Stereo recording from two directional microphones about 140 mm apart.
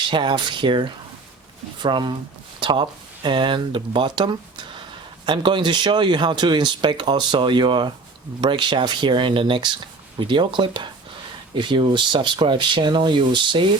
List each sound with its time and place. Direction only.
0.1 s speech: 35° right (ahead or behind)